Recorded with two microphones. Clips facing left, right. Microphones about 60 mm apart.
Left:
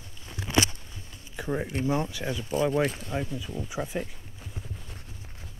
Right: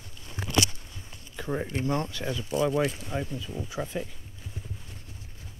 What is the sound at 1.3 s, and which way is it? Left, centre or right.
Speech, centre.